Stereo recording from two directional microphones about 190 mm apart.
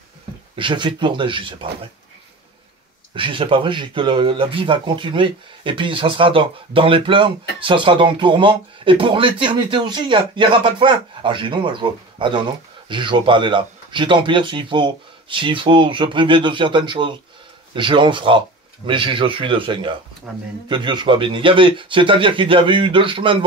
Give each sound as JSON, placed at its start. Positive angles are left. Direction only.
{"t": 0.6, "sound": "speech", "side_deg": -25}
{"t": 3.2, "sound": "speech", "side_deg": -25}